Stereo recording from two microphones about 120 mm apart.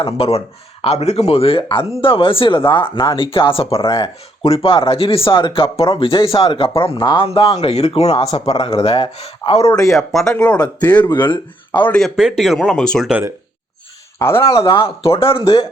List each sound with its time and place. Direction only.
0.0 s speech: 55° left (ahead or behind)
9.7 s speech: centre (ahead or behind); by 11.3 s 15° left (ahead or behind)
11.3 s speech: 45° left (ahead or behind)
11.9 s speech: 5° left (ahead or behind)
14.6 s speech: 50° left (ahead or behind)